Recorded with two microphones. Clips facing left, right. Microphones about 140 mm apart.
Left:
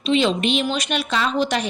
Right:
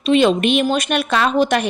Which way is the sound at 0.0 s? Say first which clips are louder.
Right 5 dB; 55° right (ahead or behind).